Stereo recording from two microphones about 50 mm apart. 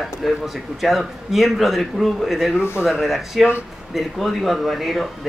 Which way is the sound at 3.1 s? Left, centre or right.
Centre.